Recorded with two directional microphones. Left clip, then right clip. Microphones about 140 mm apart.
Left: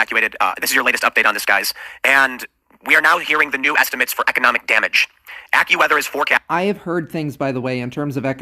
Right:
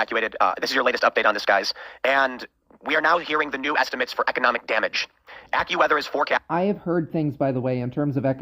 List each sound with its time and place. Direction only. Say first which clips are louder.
0.0 s speech: left 5 dB; 15° left (ahead or behind)